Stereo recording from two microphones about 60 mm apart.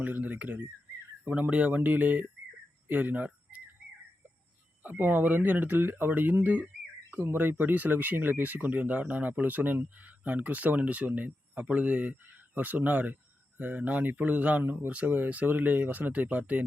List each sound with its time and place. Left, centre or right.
0.0 s speech: right
2.8 s fowl: right
4.8 s speech: right